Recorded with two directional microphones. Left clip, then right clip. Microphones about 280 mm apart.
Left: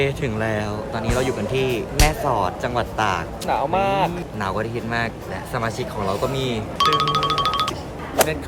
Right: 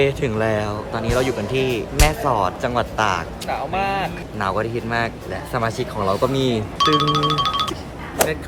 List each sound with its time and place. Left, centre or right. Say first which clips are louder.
0.0 s speech: right 3 dB; centre
3.4 s speech: left 5 dB; left
4.4 s speech: right 4 dB; centre
6.7 s speech: even; centre